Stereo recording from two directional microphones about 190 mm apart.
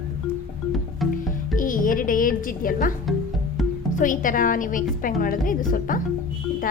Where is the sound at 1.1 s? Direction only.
45° left (ahead or behind).